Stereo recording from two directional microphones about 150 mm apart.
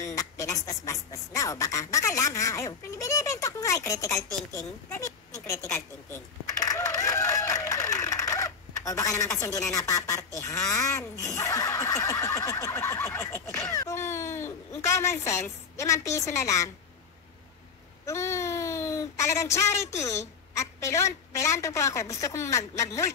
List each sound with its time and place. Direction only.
0.0 s a sound: 20° left (ahead or behind)
0.7 s speech: 20° left (ahead or behind)
18.0 s speech: 20° left (ahead or behind)